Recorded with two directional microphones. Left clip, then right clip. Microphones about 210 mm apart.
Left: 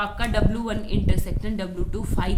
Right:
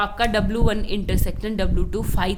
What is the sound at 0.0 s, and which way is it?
A woman's voice, 50° right (ahead or behind).